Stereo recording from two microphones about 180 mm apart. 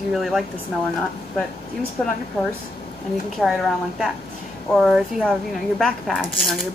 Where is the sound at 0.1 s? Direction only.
Centre (ahead or behind).